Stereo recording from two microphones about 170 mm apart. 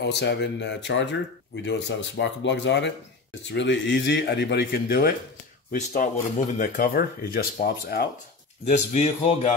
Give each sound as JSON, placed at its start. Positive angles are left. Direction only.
{"t": 0.0, "sound": "a man's voice", "side_deg": 85}
{"t": 5.7, "sound": "speech", "side_deg": 50}
{"t": 8.6, "sound": "speech", "side_deg": 45}